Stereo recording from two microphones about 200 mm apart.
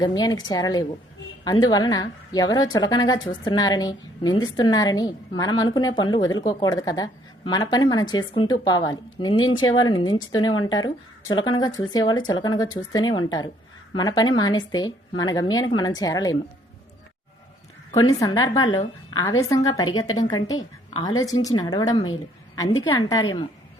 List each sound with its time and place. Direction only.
0.0 s a woman's voice: 20° left (ahead or behind)
17.9 s a woman's voice: 15° left (ahead or behind)